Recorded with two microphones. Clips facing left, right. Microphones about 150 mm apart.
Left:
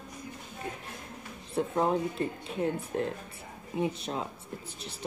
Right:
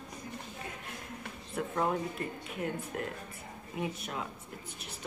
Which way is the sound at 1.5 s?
25° left (ahead or behind).